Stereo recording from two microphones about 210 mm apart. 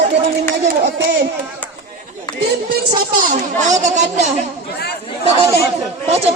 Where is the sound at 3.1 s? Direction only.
40° right (ahead or behind).